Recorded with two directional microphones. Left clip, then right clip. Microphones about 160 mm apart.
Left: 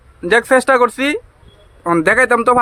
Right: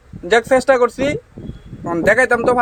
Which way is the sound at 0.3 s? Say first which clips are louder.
Left 1 dB; 35° left (ahead or behind).